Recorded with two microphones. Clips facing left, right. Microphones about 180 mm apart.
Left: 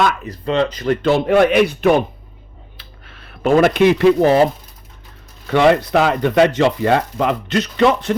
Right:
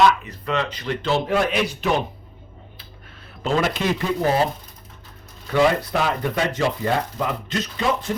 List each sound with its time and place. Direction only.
0.0 s speech: 50° left (ahead or behind)
0.4 s speech: 30° left (ahead or behind)
1.3 s a man's voice: 65° left (ahead or behind)
2.7 s a sound: 75° left (ahead or behind)
5.5 s speech: 85° left